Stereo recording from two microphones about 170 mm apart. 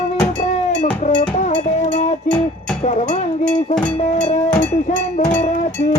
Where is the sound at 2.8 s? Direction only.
45° left (ahead or behind).